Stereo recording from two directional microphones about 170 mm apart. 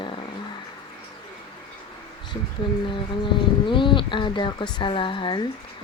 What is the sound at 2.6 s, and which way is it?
Speech, 25° left (ahead or behind).